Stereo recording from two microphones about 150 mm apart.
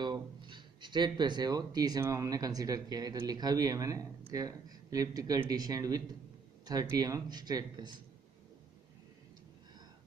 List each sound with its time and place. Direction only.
0.0 s speech: 30° right (ahead or behind)